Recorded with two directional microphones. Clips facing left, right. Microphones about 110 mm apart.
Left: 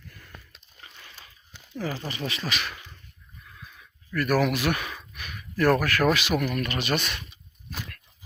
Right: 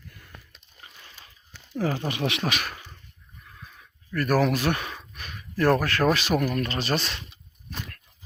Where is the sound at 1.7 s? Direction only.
50° right (ahead or behind).